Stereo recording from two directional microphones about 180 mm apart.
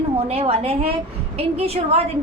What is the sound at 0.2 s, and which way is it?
A woman's voice, 35° right (ahead or behind).